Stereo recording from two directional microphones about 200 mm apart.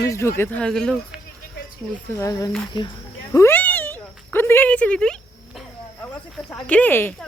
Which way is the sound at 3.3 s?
10° left (ahead or behind).